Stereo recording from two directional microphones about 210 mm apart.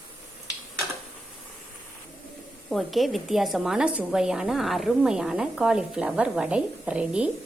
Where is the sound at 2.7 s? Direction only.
Centre (ahead or behind).